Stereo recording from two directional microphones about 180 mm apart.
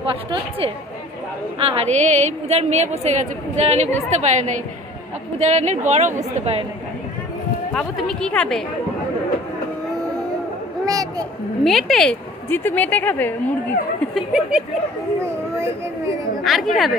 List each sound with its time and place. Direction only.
0.0 s a woman's voice: 30° right (ahead or behind)
5.4 s a woman's voice: 40° right (ahead or behind)
7.7 s speech: 5° left (ahead or behind)
10.9 s a sound: 20° right (ahead or behind)
11.6 s a woman's voice: centre (ahead or behind)
14.1 s speech: 5° right (ahead or behind)
16.4 s speech: centre (ahead or behind)